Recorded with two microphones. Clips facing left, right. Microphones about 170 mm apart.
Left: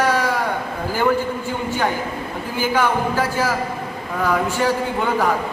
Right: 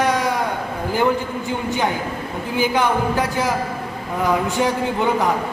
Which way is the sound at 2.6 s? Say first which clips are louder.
Right 1 dB; 20° right (ahead or behind).